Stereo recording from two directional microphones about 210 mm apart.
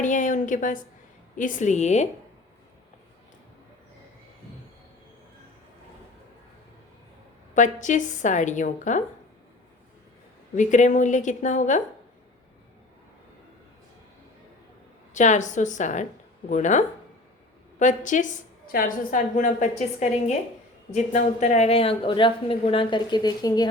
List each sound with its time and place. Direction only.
0.0 s a sound: 35° left (ahead or behind)
1.4 s a woman's voice: 35° left (ahead or behind)
7.5 s a woman's voice: 35° left (ahead or behind)
10.5 s a woman's voice: 35° left (ahead or behind)
15.1 s a woman's voice: 35° left (ahead or behind); by 23.6 s 20° left (ahead or behind)